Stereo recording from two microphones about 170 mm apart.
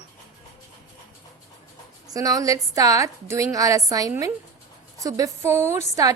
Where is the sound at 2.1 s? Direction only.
20° right (ahead or behind).